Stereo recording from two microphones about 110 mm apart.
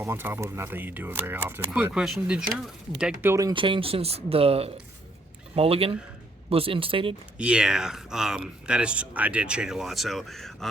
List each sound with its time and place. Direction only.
0.0 s speech: 20° right (ahead or behind)
1.9 s speech: 5° right (ahead or behind)
3.2 s speech: 20° right (ahead or behind)
3.5 s speech: 50° right (ahead or behind)
7.3 s speech: 10° right (ahead or behind)